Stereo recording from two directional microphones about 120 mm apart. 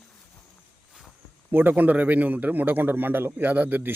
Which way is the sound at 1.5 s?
15° right (ahead or behind).